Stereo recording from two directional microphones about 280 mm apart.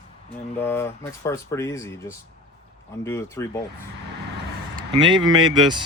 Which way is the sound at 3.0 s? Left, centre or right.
Centre.